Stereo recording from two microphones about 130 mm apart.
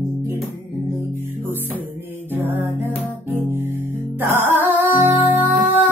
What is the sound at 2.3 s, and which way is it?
Music, 15° right (ahead or behind).